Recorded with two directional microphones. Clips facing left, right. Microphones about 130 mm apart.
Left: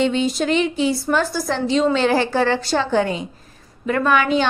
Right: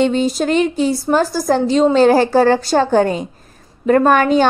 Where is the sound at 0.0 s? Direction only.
40° right (ahead or behind).